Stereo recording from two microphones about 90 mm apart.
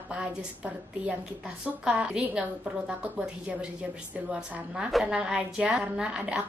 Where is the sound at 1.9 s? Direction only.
10° right (ahead or behind).